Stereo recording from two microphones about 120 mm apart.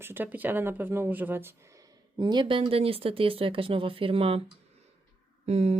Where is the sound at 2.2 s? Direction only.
40° right (ahead or behind).